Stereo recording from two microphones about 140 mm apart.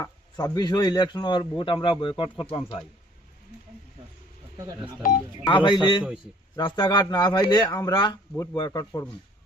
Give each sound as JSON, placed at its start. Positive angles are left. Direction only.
{"t": 0.0, "sound": "a man's voice", "side_deg": 30}
{"t": 4.5, "sound": "speech", "side_deg": -25}
{"t": 5.5, "sound": "a man's voice", "side_deg": 35}